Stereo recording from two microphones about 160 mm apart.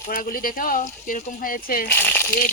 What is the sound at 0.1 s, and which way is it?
Speech, 60° left (ahead or behind).